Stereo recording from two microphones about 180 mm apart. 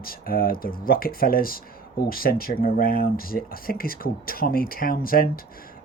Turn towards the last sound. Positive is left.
turn(degrees=55)  # may be behind; listen again after turning